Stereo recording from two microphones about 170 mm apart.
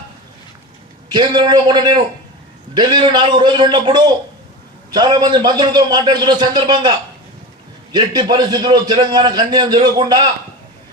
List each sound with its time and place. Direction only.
1.1 s a man's voice: 25° right (ahead or behind)
7.9 s a man's voice: 25° right (ahead or behind)